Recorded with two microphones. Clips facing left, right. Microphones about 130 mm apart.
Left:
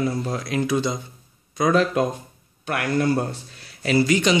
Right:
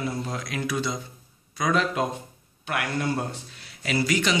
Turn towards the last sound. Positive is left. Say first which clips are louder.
# left 6 dB
turn(degrees=25)  # may be behind; listen again after turning